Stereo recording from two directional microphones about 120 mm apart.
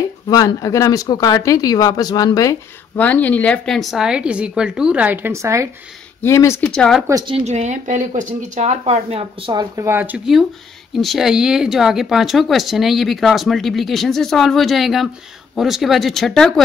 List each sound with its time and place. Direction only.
0.3 s speech: 30° left (ahead or behind)
3.0 s speech: 15° left (ahead or behind); by 5.7 s 25° right (ahead or behind)
6.2 s speech: 25° left (ahead or behind)
6.7 s speech: 5° left (ahead or behind)
7.4 s speech: 70° right (ahead or behind); by 9.5 s 55° right (ahead or behind)
9.8 s speech: 20° right (ahead or behind)
11.0 s speech: centre (ahead or behind)